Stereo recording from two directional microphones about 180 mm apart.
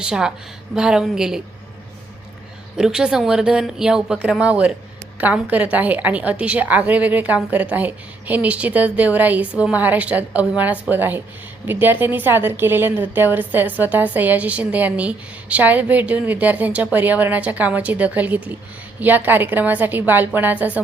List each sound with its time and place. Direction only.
0.0 s speech: 5° right (ahead or behind)
2.7 s a woman's voice: 5° right (ahead or behind)